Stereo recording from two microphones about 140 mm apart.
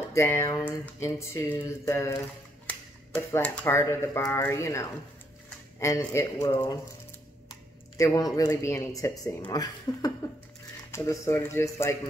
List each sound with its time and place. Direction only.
0.1 s speech: 20° left (ahead or behind)
8.1 s speech: 25° left (ahead or behind)